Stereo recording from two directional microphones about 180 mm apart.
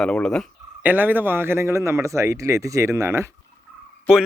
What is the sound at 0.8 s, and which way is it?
Speech, 10° right (ahead or behind).